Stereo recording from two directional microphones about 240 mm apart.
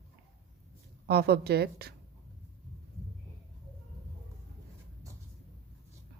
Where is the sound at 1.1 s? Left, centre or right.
Right.